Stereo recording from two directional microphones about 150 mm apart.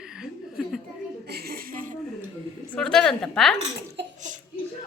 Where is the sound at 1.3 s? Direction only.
90° right.